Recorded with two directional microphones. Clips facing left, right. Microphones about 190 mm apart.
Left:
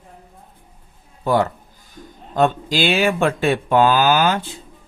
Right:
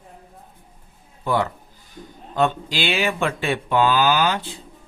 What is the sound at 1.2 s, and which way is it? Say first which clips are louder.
Speech: left 4 dB; 40° left (ahead or behind).